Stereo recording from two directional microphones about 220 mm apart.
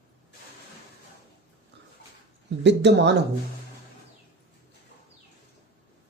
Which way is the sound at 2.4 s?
50° right (ahead or behind).